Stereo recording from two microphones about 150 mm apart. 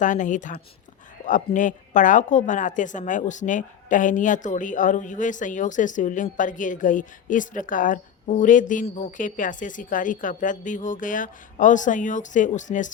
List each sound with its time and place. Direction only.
0.0 s a woman's voice: 55° left (ahead or behind)